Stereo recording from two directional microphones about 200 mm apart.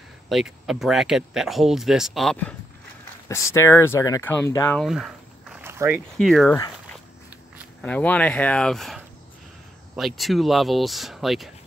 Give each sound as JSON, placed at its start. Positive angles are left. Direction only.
{"t": 0.3, "sound": "speech", "side_deg": 0}
{"t": 4.7, "sound": "walk", "side_deg": 0}
{"t": 5.6, "sound": "a sound", "side_deg": -10}
{"t": 6.1, "sound": "speech", "side_deg": 0}
{"t": 7.8, "sound": "speech", "side_deg": 5}